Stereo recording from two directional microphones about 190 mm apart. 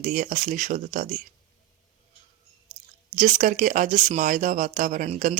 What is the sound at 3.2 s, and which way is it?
Speech, 45° right (ahead or behind).